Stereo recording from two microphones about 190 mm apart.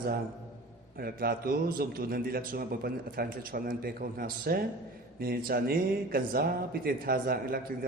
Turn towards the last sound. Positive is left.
turn(degrees=-50)  # may be behind; listen again after turning